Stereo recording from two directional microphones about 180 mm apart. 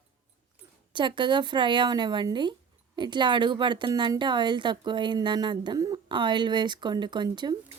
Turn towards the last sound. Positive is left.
turn(degrees=-25)  # may be behind; listen again after turning